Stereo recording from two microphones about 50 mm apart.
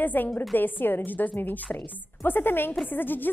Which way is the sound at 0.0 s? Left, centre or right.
Left.